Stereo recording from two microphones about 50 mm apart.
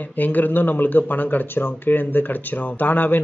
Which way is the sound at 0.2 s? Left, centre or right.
Left.